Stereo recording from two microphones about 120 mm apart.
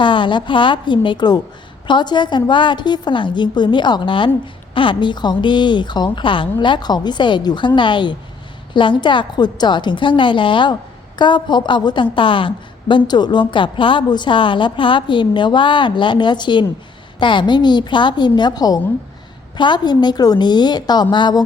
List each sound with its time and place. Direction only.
0.0 s a woman's voice: 45° left (ahead or behind)